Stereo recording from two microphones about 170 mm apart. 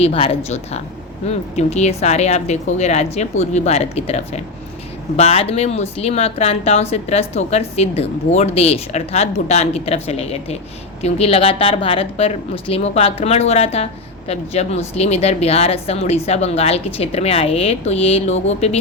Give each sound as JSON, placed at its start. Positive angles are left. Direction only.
{"t": 0.0, "sound": "speech", "side_deg": 35}